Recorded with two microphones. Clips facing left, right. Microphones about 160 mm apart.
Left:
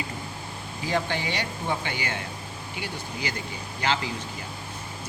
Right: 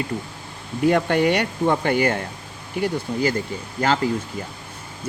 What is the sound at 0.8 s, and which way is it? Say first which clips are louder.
Speech: right 10 dB; 60° right (ahead or behind).